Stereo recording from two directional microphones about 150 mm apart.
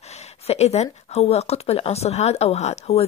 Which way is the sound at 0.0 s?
45° left (ahead or behind).